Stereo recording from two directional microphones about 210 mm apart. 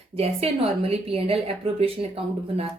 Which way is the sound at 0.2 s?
30° right (ahead or behind).